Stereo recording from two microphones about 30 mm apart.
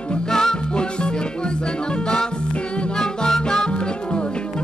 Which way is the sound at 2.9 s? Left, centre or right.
Left.